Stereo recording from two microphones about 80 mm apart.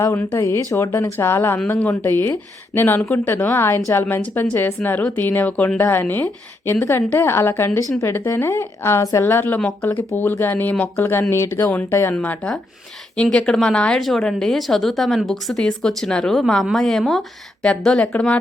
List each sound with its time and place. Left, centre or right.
0.2 s a woman's voice: left
1.8 s a woman's voice: centre
9.6 s speech: centre
10.2 s a woman's voice: left
12.1 s a woman's voice: left
13.3 s speech: centre